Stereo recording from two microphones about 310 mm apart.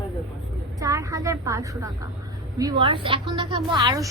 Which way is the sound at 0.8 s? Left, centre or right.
Centre.